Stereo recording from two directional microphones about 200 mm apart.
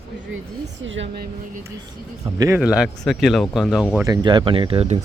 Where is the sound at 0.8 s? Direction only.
70° right (ahead or behind).